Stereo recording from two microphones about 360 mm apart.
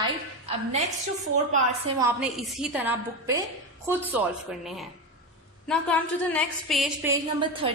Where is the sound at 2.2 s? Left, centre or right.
Centre.